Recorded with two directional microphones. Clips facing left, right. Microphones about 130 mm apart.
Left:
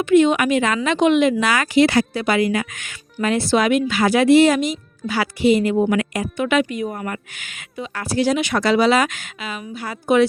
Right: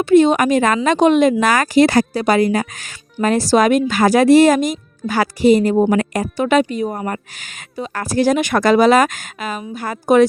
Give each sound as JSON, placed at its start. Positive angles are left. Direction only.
{"t": 0.0, "sound": "speech", "side_deg": -35}